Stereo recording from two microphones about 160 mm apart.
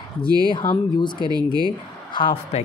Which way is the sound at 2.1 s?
30° left (ahead or behind).